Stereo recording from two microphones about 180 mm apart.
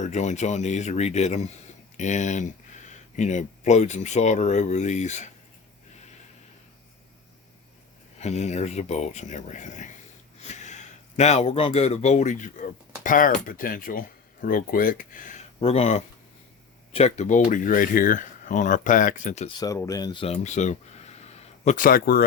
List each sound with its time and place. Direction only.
0.0 s speech: 40° left (ahead or behind)
8.2 s speech: 40° left (ahead or behind)
19.5 s speech: 20° left (ahead or behind); by 22.2 s 55° left (ahead or behind)